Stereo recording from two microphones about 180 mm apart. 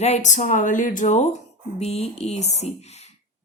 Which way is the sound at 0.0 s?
40° left (ahead or behind).